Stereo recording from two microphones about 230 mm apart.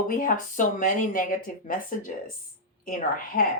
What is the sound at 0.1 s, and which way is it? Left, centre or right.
Speech, left.